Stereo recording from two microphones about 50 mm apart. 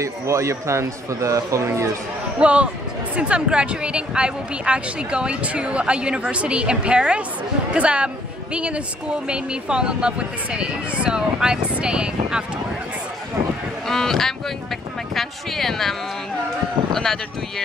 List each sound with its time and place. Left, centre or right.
0.0 s a man's voice: right
2.4 s speech: right
13.8 s speech: centre